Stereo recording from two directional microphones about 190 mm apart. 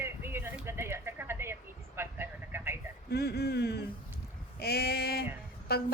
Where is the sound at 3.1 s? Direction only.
60° left (ahead or behind).